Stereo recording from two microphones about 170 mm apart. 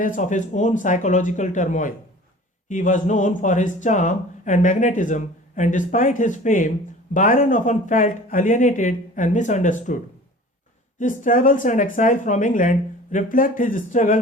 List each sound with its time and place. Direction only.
0.0 s speech: 50° left (ahead or behind)
11.0 s speech: 50° left (ahead or behind)